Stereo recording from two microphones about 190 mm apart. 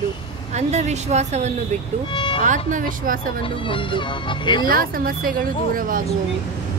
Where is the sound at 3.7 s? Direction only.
25° left (ahead or behind).